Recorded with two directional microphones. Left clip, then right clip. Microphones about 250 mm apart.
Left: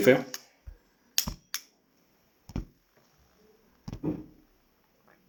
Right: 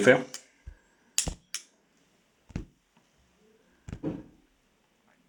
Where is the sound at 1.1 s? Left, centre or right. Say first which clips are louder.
Left 1 dB; left.